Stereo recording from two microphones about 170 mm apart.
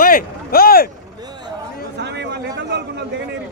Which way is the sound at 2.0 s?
85° right.